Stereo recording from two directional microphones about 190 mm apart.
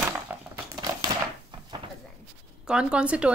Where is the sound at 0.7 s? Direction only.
20° right (ahead or behind).